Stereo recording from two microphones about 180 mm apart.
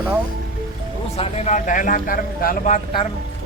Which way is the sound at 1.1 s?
35° left (ahead or behind).